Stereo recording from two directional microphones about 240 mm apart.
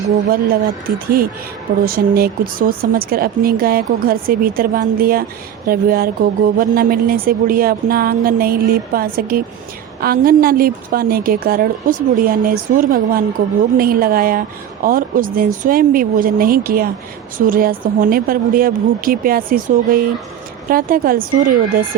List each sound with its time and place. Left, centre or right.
0.3 s speech: right